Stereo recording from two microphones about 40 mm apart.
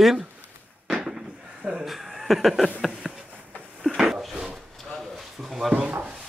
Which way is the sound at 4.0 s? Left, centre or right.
Centre.